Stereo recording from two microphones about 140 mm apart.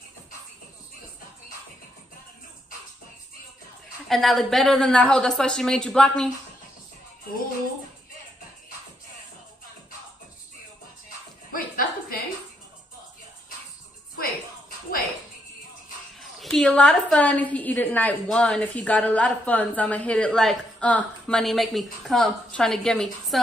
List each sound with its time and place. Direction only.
4.1 s a woman's voice: centre (ahead or behind)
11.5 s a sound: 90° left
16.2 s a woman's voice: centre (ahead or behind)